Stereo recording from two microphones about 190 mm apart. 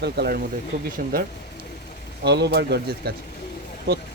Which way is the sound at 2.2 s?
60° right (ahead or behind).